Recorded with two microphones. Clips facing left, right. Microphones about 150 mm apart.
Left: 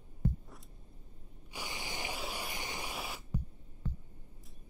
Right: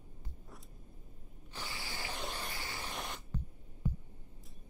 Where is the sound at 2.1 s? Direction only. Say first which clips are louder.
Left 1 dB; 10° left (ahead or behind).